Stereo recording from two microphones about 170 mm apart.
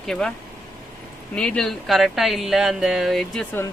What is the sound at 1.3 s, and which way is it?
Speech, 5° left (ahead or behind).